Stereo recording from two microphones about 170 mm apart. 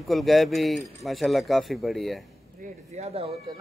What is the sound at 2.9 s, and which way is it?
Speech, 35° right (ahead or behind).